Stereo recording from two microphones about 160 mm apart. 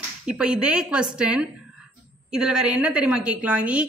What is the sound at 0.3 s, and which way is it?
Speech, 5° right (ahead or behind).